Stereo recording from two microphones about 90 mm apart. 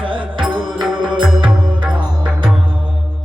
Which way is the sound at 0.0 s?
70° right (ahead or behind).